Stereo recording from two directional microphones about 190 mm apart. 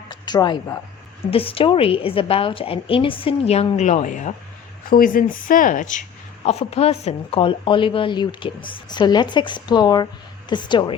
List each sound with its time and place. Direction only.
0.1 s speech: 20° left (ahead or behind)